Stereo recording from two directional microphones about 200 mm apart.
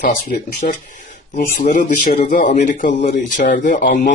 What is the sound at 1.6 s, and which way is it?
Speech, 40° left (ahead or behind).